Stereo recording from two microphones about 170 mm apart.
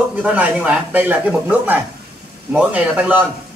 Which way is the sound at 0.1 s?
10° right (ahead or behind).